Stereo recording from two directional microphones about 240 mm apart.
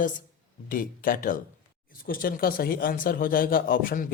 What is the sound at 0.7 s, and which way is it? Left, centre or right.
Speech, left.